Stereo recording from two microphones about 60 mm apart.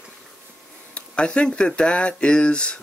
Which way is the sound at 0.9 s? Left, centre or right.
Centre.